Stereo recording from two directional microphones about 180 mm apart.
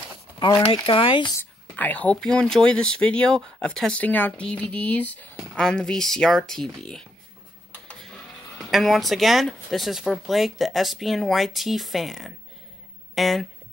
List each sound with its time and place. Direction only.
0.8 s speech: 30° left (ahead or behind)
1.4 s speech: 10° left (ahead or behind)
8.5 s speech: centre (ahead or behind)